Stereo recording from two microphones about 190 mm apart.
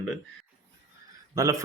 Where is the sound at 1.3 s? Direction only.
15° right (ahead or behind).